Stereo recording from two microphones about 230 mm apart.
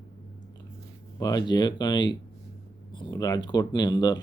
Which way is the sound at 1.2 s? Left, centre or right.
Centre.